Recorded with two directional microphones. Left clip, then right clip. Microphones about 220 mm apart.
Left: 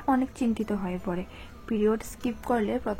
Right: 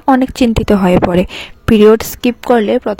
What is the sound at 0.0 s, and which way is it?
A woman's voice, 45° right (ahead or behind).